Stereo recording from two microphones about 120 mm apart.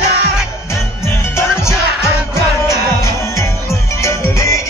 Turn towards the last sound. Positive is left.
turn(degrees=25)  # may be behind; listen again after turning